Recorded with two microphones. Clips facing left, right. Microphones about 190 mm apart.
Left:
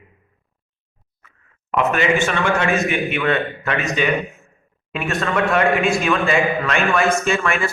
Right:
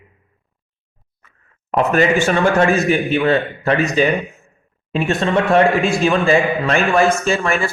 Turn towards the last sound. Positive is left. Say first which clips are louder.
# right 2 dB
turn(degrees=-35)  # may be behind; listen again after turning